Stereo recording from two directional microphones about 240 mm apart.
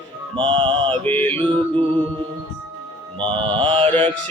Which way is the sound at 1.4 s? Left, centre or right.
Right.